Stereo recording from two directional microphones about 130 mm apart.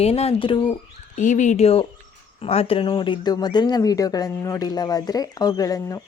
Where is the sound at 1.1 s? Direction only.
75° left (ahead or behind).